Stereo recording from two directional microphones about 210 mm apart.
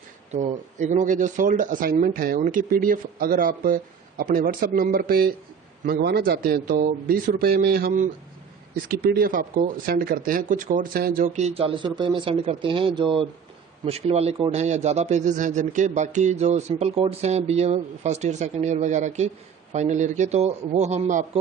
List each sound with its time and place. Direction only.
0.3 s a man's voice: 35° right (ahead or behind)